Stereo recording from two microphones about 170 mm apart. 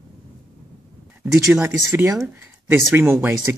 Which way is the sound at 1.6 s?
20° right (ahead or behind).